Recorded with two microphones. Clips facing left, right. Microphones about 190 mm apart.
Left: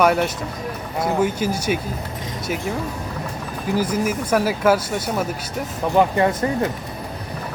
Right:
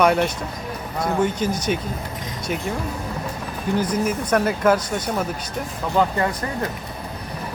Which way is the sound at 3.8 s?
5° left (ahead or behind).